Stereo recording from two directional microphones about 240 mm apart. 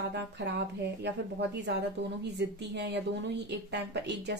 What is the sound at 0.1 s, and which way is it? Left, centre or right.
A woman's voice, right.